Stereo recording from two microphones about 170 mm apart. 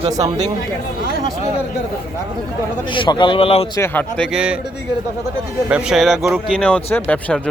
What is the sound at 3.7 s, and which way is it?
Speech, 15° left (ahead or behind).